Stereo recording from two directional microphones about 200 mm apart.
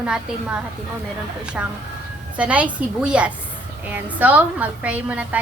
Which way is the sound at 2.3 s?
5° right (ahead or behind).